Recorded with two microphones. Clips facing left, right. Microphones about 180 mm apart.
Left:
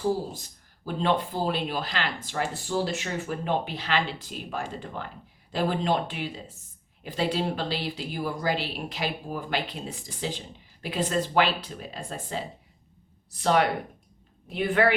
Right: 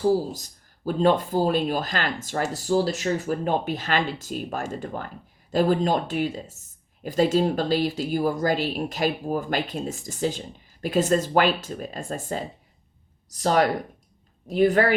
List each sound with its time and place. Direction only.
0.3 s speech: 40° right (ahead or behind)